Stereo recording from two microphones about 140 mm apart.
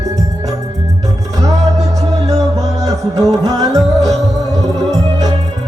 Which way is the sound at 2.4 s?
25° right (ahead or behind).